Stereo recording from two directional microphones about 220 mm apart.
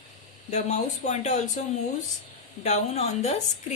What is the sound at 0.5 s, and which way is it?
Speech, 30° left (ahead or behind).